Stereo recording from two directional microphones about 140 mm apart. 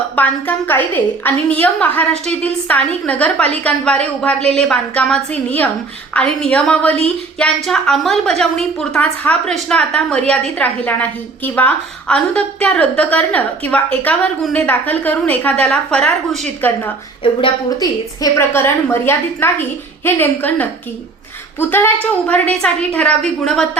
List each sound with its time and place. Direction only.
0.2 s a woman's voice: 15° left (ahead or behind)
17.4 s a woman's voice: 25° left (ahead or behind); by 23.6 s 5° left (ahead or behind)